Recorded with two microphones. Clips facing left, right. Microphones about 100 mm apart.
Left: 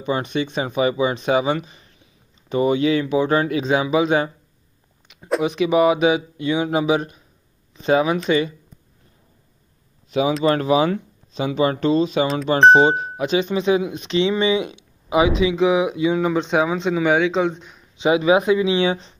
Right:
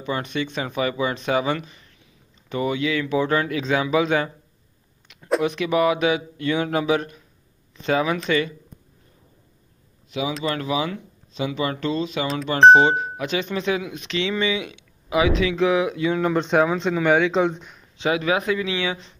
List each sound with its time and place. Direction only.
0.0 s speech: 20° left (ahead or behind)
5.0 s a sound: 15° left (ahead or behind)
5.4 s speech: 15° left (ahead or behind)
10.4 s speech: 35° left (ahead or behind); by 17.7 s centre (ahead or behind)
17.9 s speech: 20° left (ahead or behind)